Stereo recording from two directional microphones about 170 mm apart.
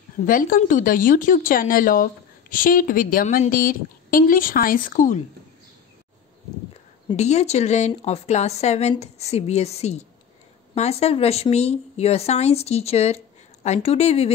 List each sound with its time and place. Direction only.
0.3 s a woman's voice: 55° left (ahead or behind)
7.2 s speech: 40° left (ahead or behind)